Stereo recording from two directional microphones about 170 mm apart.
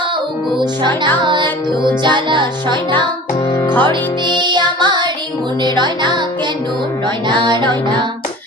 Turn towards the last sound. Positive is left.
turn(degrees=-25)  # may be behind; listen again after turning